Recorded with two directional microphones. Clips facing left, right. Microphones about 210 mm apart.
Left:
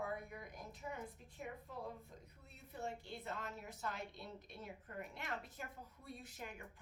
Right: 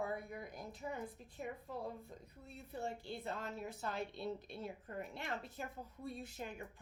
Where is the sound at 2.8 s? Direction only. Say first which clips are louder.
Right 2 dB; 30° right (ahead or behind).